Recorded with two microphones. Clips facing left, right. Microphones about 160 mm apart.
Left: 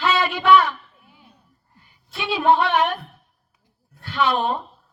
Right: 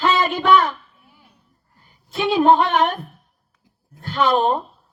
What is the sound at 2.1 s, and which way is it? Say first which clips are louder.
A man's voice: right 4 dB; 45° right (ahead or behind).